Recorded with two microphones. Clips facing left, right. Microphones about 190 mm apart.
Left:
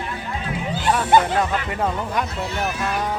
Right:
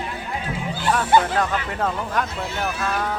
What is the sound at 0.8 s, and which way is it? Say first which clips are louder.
Speech: left 1 dB; 15° left (ahead or behind).